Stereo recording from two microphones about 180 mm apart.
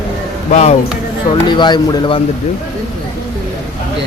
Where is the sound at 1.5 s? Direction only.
25° left (ahead or behind).